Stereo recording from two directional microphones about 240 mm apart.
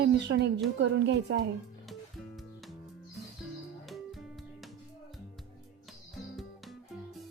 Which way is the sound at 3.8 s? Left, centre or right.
Centre.